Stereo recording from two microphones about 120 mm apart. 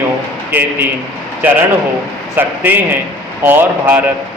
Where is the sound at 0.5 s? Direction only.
15° right (ahead or behind).